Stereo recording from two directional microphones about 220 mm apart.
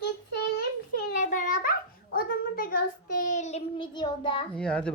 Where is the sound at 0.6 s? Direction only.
40° left (ahead or behind); by 4.4 s 20° left (ahead or behind).